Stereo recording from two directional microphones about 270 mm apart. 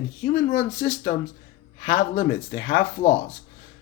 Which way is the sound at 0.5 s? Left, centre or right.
Left.